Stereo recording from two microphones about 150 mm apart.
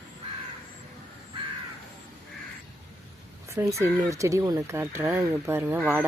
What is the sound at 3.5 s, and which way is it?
Speech, 20° right (ahead or behind).